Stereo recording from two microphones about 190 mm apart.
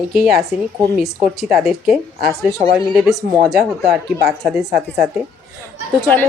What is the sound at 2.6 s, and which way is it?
Speech, 25° right (ahead or behind).